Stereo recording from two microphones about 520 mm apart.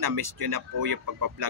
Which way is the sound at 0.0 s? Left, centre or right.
Right.